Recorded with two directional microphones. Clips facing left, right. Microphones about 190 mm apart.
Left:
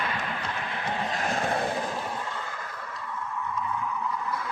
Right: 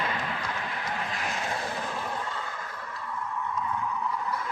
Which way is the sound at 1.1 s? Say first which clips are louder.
Left 5 dB; 50° left (ahead or behind).